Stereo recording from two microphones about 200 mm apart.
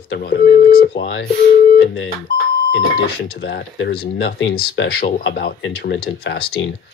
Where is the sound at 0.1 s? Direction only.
55° left (ahead or behind).